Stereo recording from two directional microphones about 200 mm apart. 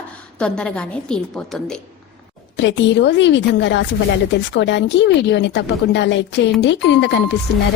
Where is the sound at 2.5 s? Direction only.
65° left (ahead or behind).